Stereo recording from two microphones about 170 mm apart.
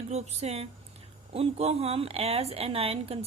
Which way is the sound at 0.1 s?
40° right (ahead or behind).